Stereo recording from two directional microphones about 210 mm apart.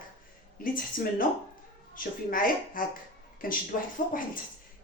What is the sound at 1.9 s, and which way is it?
Speech, 40° left (ahead or behind).